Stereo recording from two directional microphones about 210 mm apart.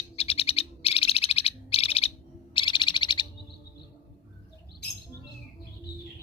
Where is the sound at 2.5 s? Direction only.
20° left (ahead or behind).